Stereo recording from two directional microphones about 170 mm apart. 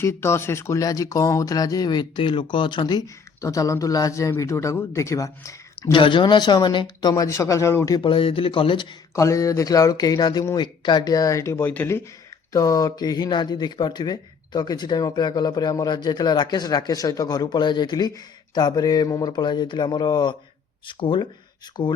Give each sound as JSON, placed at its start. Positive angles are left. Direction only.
{"t": 0.0, "sound": "speech", "side_deg": 15}